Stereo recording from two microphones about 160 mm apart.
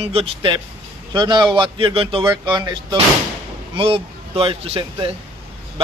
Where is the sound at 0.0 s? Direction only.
35° right (ahead or behind).